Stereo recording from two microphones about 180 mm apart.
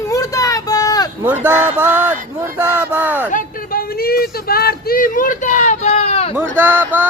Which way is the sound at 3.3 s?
55° left (ahead or behind).